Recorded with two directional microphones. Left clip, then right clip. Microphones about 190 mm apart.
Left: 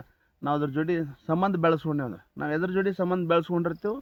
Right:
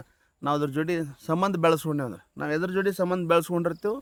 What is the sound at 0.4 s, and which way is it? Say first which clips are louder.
A man's voice: right 1 dB; 20° right (ahead or behind).